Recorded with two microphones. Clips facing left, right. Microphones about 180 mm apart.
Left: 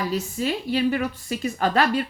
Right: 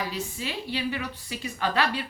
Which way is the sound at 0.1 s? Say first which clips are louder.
Left 8 dB; 45° left (ahead or behind).